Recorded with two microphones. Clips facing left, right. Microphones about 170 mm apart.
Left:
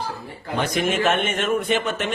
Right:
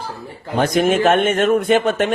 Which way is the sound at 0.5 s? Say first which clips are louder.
Right 7 dB; 45° right (ahead or behind).